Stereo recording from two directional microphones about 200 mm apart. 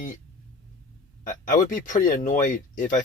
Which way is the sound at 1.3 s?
40° left (ahead or behind).